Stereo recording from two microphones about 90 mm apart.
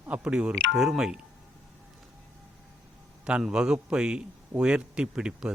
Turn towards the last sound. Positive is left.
turn(degrees=-10)  # may be behind; listen again after turning